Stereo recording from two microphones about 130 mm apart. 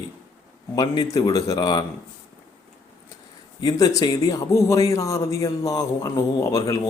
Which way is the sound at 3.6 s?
30° left (ahead or behind).